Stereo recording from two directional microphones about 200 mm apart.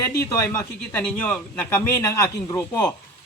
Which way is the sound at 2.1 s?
15° left (ahead or behind).